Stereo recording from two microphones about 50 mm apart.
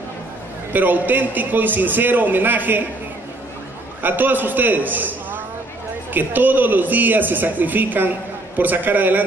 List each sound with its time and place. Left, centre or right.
0.7 s a man's voice: right
4.0 s a man's voice: right